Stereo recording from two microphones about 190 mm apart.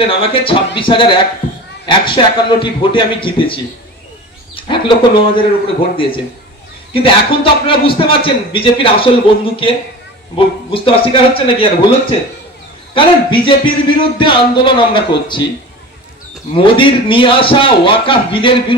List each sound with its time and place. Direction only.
0.0 s a man's voice: 30° left (ahead or behind)
6.9 s a man's voice: 30° left (ahead or behind)
12.9 s a man's voice: 25° left (ahead or behind)
16.5 s a man's voice: 25° left (ahead or behind)